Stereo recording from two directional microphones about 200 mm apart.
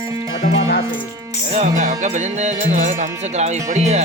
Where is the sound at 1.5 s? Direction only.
35° right (ahead or behind).